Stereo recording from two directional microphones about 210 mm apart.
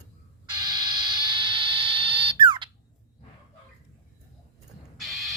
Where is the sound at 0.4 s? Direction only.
20° right (ahead or behind).